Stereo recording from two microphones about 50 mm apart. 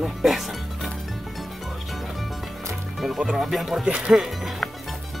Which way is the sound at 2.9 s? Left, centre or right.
Centre.